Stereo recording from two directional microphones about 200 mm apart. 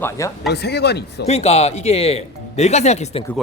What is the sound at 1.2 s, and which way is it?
Speech, 30° left (ahead or behind).